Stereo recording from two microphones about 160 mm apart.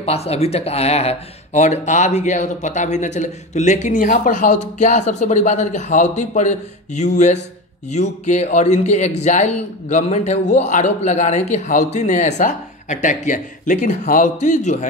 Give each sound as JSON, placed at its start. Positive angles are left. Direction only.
{"t": 0.0, "sound": "speech", "side_deg": 40}